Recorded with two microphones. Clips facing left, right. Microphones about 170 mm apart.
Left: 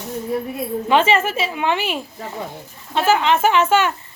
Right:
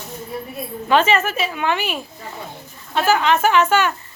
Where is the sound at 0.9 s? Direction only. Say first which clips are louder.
Even; 25° left (ahead or behind).